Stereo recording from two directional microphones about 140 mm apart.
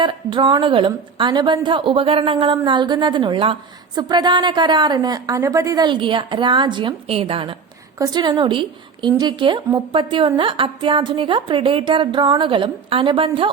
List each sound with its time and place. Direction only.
0.0 s a woman's voice: 35° right (ahead or behind)
7.9 s a woman's voice: 30° right (ahead or behind)